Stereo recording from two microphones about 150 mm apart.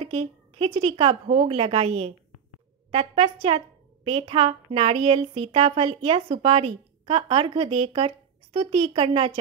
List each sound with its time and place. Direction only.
0.0 s a sound: 40° right (ahead or behind)
0.8 s a woman's voice: 30° right (ahead or behind)
1.2 s a woman's voice: 45° right (ahead or behind)
6.2 s a woman's voice: 55° right (ahead or behind)
6.5 s a woman's voice: 40° right (ahead or behind)